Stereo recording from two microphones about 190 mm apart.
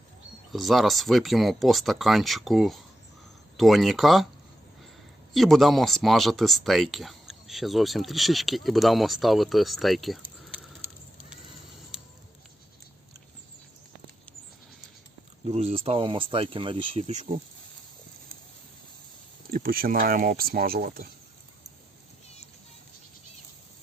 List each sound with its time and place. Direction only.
0.5 s speech: centre (ahead or behind)
5.3 s speech: centre (ahead or behind)
11.3 s a sound: 5° right (ahead or behind)
15.4 s speech: 35° right (ahead or behind)
19.5 s speech: 50° right (ahead or behind)